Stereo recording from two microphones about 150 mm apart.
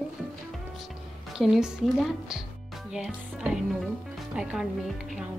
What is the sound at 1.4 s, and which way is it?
A woman's voice, centre (ahead or behind).